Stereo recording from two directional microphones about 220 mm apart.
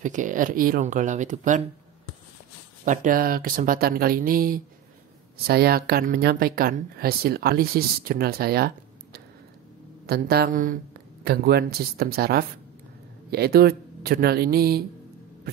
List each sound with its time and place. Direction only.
0.0 s speech: 35° right (ahead or behind)
2.8 s speech: 35° right (ahead or behind)